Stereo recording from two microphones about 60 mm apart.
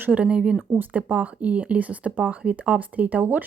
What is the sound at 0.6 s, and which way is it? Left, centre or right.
Speech, right.